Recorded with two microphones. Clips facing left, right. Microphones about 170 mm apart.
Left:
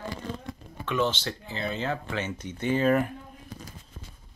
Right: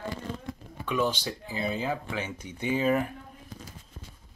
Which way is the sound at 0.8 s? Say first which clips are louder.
Left 1 dB; 10° right (ahead or behind).